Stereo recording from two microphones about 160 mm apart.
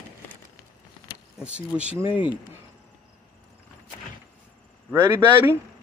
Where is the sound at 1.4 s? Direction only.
5° right (ahead or behind).